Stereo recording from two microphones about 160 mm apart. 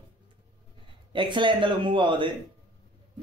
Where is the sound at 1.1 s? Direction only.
30° right (ahead or behind).